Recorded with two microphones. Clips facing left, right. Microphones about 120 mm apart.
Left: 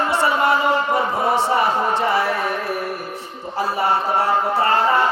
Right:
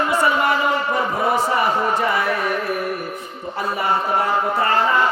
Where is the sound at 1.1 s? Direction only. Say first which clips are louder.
Right 1 dB; 30° left (ahead or behind).